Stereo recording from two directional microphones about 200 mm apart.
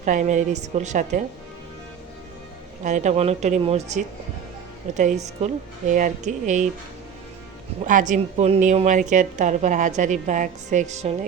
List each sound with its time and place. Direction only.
0.0 s a woman's voice: 40° right (ahead or behind)
2.8 s a woman's voice: 35° right (ahead or behind)
7.9 s a woman's voice: 40° right (ahead or behind)